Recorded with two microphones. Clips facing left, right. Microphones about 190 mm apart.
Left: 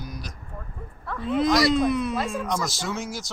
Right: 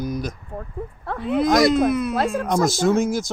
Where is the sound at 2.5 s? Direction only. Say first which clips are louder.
Right 10 dB; 50° right (ahead or behind).